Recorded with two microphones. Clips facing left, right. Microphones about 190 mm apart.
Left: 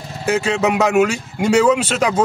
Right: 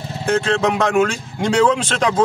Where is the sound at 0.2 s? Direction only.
5° left (ahead or behind).